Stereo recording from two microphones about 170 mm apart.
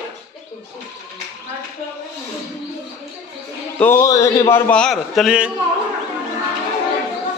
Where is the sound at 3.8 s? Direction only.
15° left (ahead or behind); by 5.5 s 5° right (ahead or behind).